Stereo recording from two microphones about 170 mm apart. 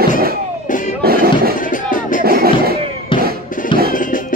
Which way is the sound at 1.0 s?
65° right (ahead or behind).